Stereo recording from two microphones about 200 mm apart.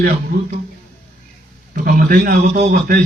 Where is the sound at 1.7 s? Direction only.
45° right (ahead or behind).